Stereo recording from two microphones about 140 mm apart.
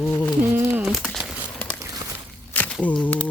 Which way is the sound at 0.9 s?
Centre (ahead or behind).